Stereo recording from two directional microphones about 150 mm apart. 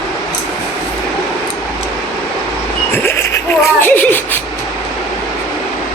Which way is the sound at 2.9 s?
15° left (ahead or behind).